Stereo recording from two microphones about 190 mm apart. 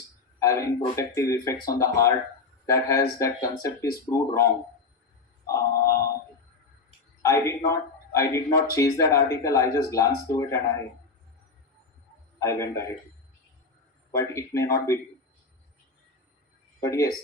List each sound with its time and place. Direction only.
0.3 s speech: 15° left (ahead or behind)
5.5 s a sound: 15° left (ahead or behind)
7.2 s a man's voice: 15° left (ahead or behind)
12.4 s speech: 15° left (ahead or behind)
14.2 s speech: 15° left (ahead or behind)
16.8 s speech: 15° left (ahead or behind)